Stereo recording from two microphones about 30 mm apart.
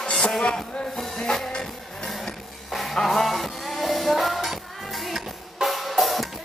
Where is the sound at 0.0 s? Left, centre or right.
Left.